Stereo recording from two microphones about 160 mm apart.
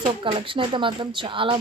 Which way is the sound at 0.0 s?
30° right (ahead or behind).